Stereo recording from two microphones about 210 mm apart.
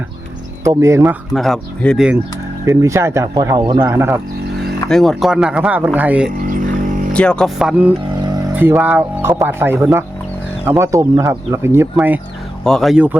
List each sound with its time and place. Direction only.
0.6 s speech: 15° right (ahead or behind)
1.3 s speech: centre (ahead or behind)
2.6 s speech: 15° right (ahead or behind)
4.9 s speech: centre (ahead or behind)
6.5 s a sound: 40° right (ahead or behind)
7.1 s speech: 5° left (ahead or behind)
8.1 s speech: 20° right (ahead or behind)